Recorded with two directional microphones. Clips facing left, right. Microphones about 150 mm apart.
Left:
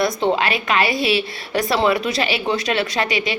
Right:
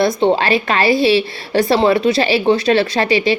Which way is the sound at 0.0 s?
30° right (ahead or behind).